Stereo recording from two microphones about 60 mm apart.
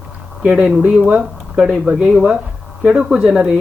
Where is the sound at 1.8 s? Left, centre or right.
Centre.